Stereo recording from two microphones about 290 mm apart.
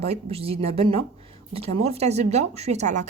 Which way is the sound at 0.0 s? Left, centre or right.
Right.